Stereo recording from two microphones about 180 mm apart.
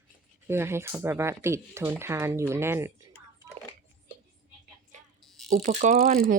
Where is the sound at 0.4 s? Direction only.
15° right (ahead or behind).